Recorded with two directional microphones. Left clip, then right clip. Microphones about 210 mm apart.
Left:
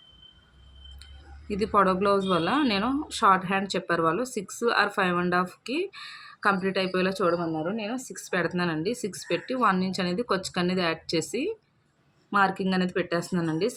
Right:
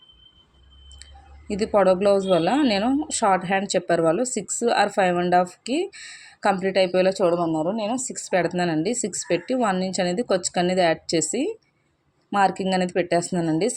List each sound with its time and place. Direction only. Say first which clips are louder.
1.5 s a woman's voice: right 4 dB; 10° right (ahead or behind)
7.8 s speech: right 7 dB; 20° left (ahead or behind)
8.0 s a woman's voice: right 5 dB; 15° right (ahead or behind)